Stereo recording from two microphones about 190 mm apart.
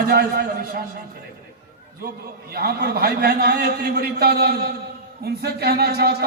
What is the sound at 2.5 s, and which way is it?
A man's voice, 55° right (ahead or behind).